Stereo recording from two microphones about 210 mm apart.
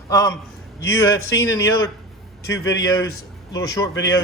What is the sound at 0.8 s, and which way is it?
Speech, 60° left (ahead or behind).